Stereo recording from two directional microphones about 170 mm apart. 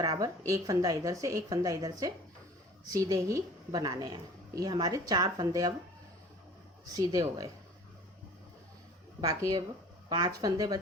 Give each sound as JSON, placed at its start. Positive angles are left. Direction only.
{"t": 0.0, "sound": "a woman's voice", "side_deg": -20}
{"t": 6.8, "sound": "a woman's voice", "side_deg": -20}
{"t": 9.2, "sound": "a woman's voice", "side_deg": -20}